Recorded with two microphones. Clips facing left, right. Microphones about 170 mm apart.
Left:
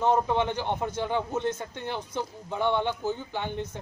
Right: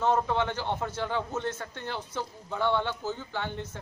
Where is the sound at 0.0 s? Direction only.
15° left (ahead or behind).